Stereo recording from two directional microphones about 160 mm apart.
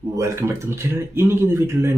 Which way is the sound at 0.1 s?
20° right (ahead or behind).